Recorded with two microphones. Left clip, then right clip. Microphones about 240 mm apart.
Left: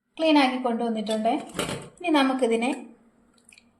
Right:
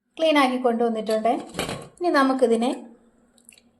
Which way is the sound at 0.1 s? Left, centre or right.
Centre.